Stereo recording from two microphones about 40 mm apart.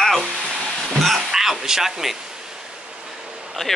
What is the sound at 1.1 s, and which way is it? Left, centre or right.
Speech, centre.